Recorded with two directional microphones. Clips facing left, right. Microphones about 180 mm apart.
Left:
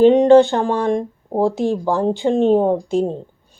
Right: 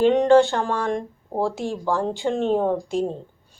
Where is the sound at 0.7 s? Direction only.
20° left (ahead or behind).